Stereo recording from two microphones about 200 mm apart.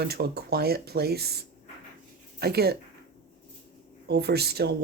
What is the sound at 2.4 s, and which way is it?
Speech, 55° right (ahead or behind).